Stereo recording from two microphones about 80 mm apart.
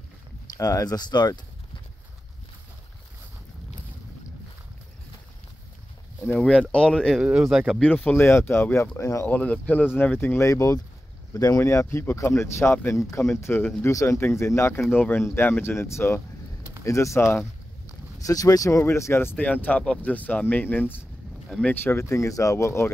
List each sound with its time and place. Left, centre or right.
0.6 s speech: left
6.7 s speech: centre
7.3 s speech: centre
7.8 s speech: centre; by 9.3 s left
9.3 s speech: centre
10.5 s speech: left
13.8 s speech: left
19.3 s speech: centre
21.5 s speech: centre
21.8 s speech: left